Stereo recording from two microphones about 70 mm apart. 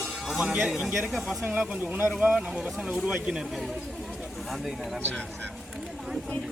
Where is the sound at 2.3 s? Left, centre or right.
Centre.